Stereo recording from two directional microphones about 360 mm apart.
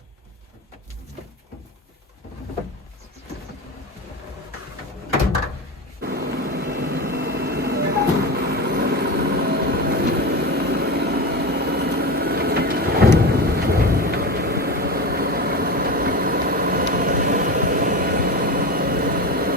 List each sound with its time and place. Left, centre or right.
6.0 s vehicle: right